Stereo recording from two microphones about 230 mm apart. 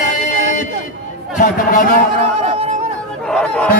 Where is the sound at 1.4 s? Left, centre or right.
Left.